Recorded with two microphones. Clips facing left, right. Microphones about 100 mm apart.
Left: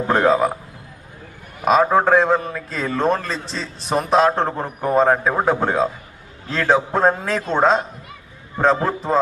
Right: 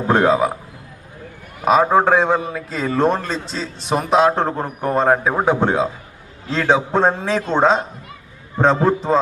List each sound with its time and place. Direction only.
0.1 s a man's voice: centre (ahead or behind)
1.7 s a man's voice: centre (ahead or behind)